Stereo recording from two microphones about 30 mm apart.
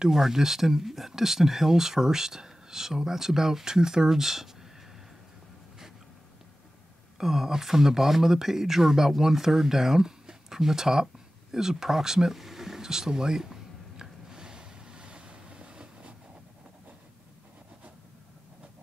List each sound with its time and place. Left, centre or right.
0.1 s speech: centre
7.2 s speech: centre
11.8 s a sound: centre
14.3 s vehicle: right